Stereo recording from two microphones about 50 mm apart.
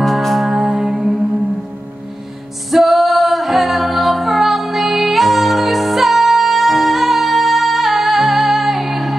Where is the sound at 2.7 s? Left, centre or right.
Centre.